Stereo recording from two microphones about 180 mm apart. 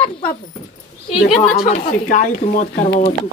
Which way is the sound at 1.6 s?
35° left (ahead or behind).